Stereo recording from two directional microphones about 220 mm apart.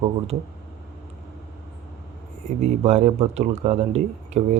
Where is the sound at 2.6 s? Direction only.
30° right (ahead or behind).